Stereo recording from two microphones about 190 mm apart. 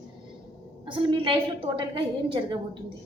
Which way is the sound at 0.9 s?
25° right (ahead or behind).